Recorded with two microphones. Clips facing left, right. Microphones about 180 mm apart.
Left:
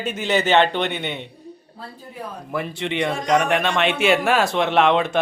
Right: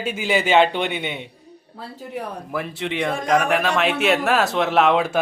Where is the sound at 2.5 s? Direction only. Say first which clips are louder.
Left 2 dB; centre (ahead or behind).